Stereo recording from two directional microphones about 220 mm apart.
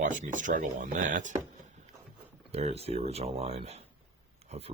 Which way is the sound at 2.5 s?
25° right (ahead or behind).